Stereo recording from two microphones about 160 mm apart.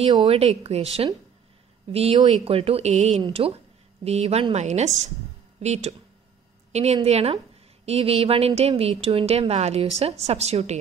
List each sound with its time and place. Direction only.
0.0 s a woman's voice: 35° right (ahead or behind)